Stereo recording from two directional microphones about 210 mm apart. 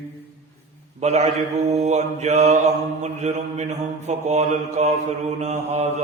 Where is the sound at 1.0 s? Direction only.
30° right (ahead or behind).